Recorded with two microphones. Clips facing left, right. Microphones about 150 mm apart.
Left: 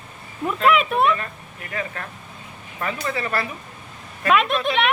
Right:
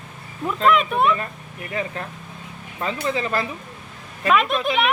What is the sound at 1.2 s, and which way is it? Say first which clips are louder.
Speech: right 3 dB; 20° right (ahead or behind).